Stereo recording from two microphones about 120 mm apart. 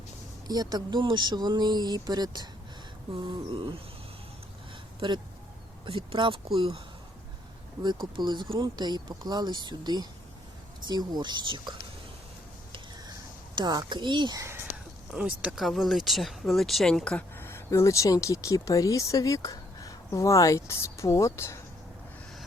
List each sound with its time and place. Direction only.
0.4 s speech: 35° right (ahead or behind)
4.9 s speech: 40° right (ahead or behind)
13.6 s speech: 35° right (ahead or behind)
15.1 s speech: 10° right (ahead or behind); by 21.6 s 25° left (ahead or behind)